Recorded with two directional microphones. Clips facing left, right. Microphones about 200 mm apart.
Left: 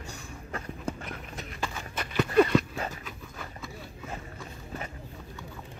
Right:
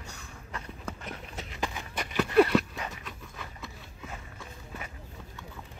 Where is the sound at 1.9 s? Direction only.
15° right (ahead or behind).